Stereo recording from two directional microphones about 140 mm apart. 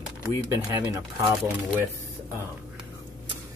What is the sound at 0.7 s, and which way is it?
Speech, 25° right (ahead or behind).